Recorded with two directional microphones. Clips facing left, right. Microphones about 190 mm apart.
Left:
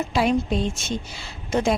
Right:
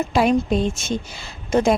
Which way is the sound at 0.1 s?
50° right (ahead or behind).